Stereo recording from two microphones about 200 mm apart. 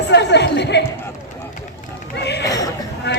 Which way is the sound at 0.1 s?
60° left (ahead or behind).